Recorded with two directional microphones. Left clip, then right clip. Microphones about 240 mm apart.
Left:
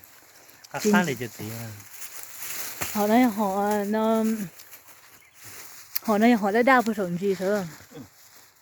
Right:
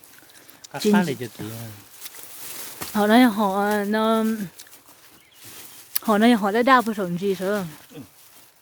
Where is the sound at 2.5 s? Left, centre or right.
Left.